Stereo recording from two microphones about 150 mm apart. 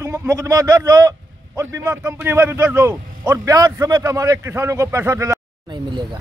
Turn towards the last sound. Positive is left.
turn(degrees=-30)  # may be behind; listen again after turning